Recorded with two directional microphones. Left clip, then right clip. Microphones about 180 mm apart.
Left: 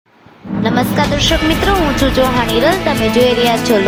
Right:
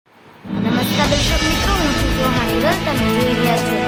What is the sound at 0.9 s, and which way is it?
Speech, centre (ahead or behind).